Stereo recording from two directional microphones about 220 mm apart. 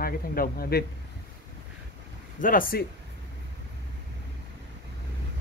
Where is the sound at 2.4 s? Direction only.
40° left (ahead or behind).